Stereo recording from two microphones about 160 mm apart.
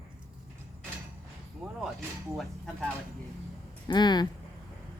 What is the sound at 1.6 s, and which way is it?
Speech, 5° right (ahead or behind).